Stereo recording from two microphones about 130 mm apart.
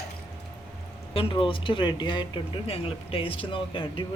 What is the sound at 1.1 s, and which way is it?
Speech, 45° left (ahead or behind).